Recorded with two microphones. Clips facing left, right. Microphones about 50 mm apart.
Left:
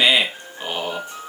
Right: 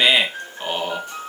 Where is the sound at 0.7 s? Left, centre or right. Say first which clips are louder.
Right 1 dB; centre.